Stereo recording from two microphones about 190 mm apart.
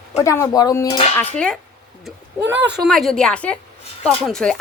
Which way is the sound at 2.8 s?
Centre (ahead or behind).